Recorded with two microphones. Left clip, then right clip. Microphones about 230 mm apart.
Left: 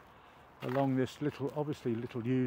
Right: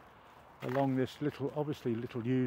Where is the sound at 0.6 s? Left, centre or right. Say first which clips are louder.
Even; centre.